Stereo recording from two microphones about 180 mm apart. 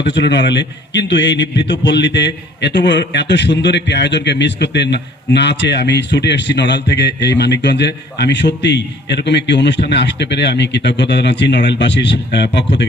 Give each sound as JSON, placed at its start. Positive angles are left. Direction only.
{"t": 0.0, "sound": "a man's voice", "side_deg": 75}